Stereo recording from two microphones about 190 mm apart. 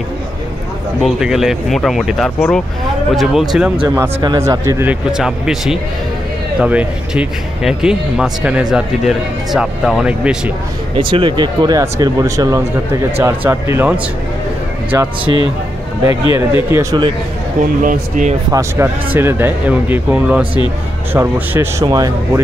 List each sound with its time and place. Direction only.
1.0 s speech: centre (ahead or behind)
3.8 s speech: 20° right (ahead or behind)
11.0 s speech: 25° right (ahead or behind)
17.8 s speech: 45° right (ahead or behind)
18.5 s speech: 15° right (ahead or behind)